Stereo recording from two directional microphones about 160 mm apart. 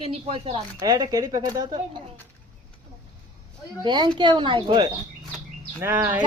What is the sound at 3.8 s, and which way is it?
A woman's voice, 30° right (ahead or behind).